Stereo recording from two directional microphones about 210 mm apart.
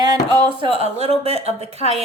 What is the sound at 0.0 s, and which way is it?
Speech, 20° right (ahead or behind).